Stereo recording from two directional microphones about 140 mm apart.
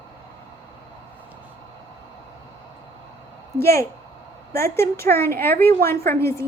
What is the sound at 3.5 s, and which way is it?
Speech, 20° left (ahead or behind).